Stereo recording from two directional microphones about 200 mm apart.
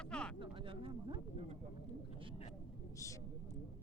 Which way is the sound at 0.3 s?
25° right (ahead or behind).